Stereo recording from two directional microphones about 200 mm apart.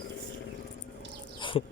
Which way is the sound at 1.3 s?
25° left (ahead or behind).